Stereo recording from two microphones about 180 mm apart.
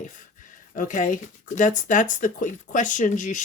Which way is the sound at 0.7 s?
45° left (ahead or behind).